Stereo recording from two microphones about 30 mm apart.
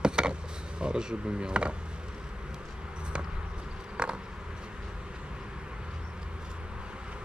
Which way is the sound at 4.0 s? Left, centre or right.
Right.